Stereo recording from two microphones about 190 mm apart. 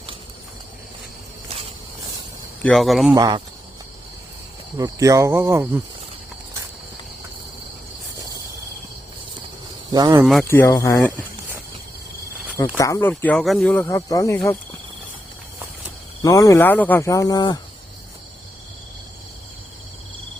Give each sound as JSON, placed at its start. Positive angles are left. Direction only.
{"t": 2.6, "sound": "speech", "side_deg": 0}
{"t": 3.2, "sound": "speech", "side_deg": -25}
{"t": 4.8, "sound": "speech", "side_deg": -15}
{"t": 9.9, "sound": "speech", "side_deg": -20}
{"t": 10.5, "sound": "speech", "side_deg": 15}
{"t": 12.7, "sound": "speech", "side_deg": 15}
{"t": 16.2, "sound": "speech", "side_deg": 15}